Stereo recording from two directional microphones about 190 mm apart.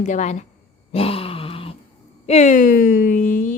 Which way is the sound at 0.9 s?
30° left (ahead or behind).